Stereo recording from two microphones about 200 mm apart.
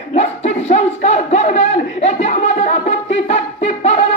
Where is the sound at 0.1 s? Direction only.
35° left (ahead or behind).